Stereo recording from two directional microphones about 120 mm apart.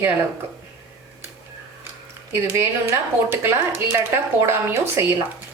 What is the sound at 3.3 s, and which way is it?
A woman's voice, 20° right (ahead or behind).